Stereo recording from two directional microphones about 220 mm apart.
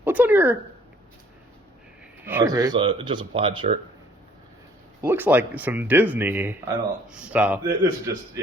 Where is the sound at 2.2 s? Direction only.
10° right (ahead or behind).